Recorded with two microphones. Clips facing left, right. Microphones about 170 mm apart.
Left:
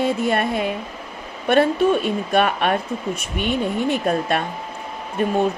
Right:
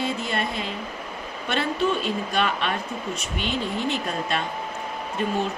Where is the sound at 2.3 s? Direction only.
50° left (ahead or behind).